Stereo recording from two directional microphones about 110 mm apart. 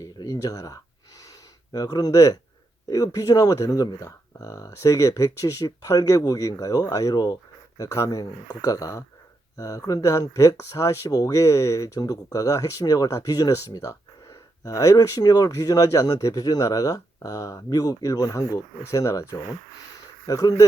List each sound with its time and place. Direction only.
0.0 s speech: 30° left (ahead or behind)